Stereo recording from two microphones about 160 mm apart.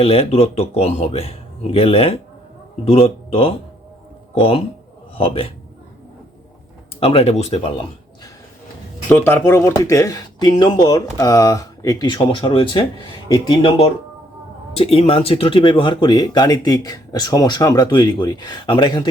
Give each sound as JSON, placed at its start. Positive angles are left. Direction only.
{"t": 0.0, "sound": "a man's voice", "side_deg": 40}
{"t": 7.0, "sound": "a man's voice", "side_deg": 35}
{"t": 9.0, "sound": "a man's voice", "side_deg": 15}